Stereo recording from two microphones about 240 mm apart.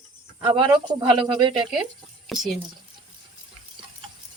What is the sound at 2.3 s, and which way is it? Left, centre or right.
Speech, centre.